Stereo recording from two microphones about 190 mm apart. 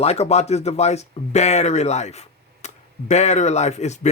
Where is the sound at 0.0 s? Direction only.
35° left (ahead or behind).